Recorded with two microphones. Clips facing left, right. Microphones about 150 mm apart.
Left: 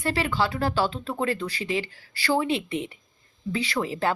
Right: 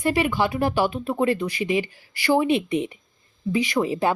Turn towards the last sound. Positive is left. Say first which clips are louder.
# right 4 dB
turn(degrees=-20)  # may be behind; listen again after turning